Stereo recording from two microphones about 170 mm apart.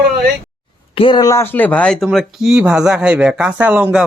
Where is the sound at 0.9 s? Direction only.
30° left (ahead or behind).